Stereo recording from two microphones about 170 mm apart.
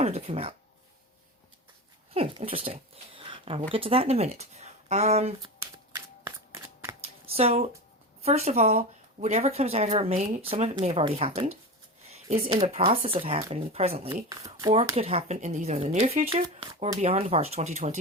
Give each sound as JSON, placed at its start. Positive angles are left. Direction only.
{"t": 0.0, "sound": "speech", "side_deg": -40}
{"t": 2.1, "sound": "speech", "side_deg": -35}
{"t": 5.4, "sound": "shuffling cards", "side_deg": -20}
{"t": 7.0, "sound": "a sound", "side_deg": -35}
{"t": 8.2, "sound": "speech", "side_deg": -40}
{"t": 14.3, "sound": "speech", "side_deg": -20}
{"t": 14.9, "sound": "speech", "side_deg": -35}